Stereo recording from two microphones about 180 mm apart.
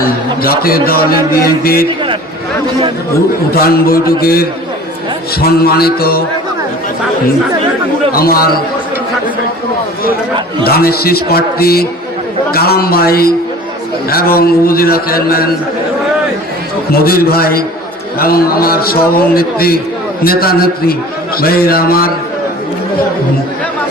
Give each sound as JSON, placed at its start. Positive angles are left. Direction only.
{"t": 0.0, "sound": "a man's voice", "side_deg": 55}
{"t": 3.5, "sound": "a man's voice", "side_deg": 55}
{"t": 8.1, "sound": "a man's voice", "side_deg": 55}
{"t": 10.6, "sound": "a man's voice", "side_deg": 60}
{"t": 16.9, "sound": "a man's voice", "side_deg": 55}